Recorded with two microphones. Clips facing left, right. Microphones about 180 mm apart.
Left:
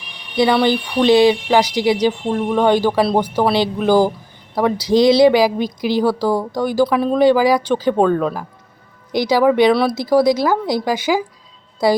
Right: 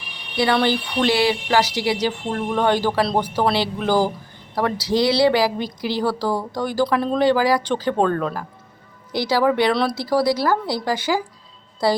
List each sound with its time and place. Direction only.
0.5 s speech: 15° left (ahead or behind)